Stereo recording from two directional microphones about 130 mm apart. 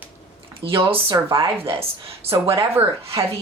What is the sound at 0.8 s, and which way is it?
Speech, 45° right (ahead or behind).